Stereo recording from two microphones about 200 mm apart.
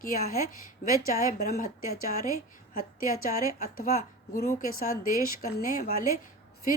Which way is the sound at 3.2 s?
45° left (ahead or behind).